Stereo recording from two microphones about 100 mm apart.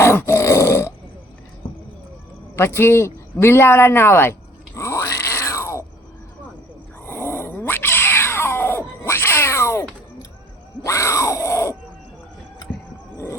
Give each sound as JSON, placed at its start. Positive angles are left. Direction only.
{"t": 0.0, "sound": "grunt", "side_deg": 25}
{"t": 2.6, "sound": "a sound", "side_deg": 25}
{"t": 7.0, "sound": "cat", "side_deg": 25}
{"t": 10.8, "sound": "grunt", "side_deg": 30}